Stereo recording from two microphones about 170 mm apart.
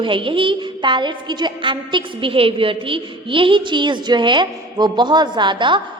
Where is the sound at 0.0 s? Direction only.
30° right (ahead or behind).